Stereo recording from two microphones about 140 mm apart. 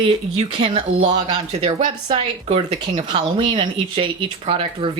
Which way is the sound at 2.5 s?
50° right (ahead or behind).